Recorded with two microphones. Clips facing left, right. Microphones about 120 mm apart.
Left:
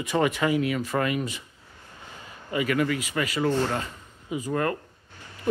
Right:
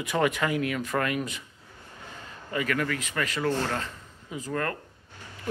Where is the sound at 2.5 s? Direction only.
10° left (ahead or behind).